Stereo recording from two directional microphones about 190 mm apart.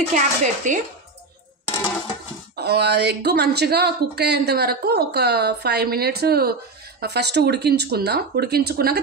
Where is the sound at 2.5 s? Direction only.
60° right (ahead or behind).